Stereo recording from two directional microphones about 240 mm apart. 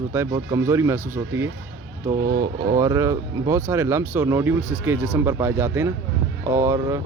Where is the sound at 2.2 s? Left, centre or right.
Right.